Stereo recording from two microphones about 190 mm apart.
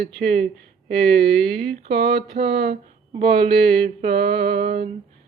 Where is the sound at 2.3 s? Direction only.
60° right (ahead or behind).